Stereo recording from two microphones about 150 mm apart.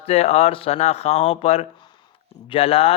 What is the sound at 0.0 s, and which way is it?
Speech, 45° left (ahead or behind).